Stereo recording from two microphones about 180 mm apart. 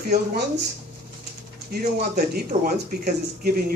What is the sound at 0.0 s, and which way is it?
Speech, 60° right (ahead or behind).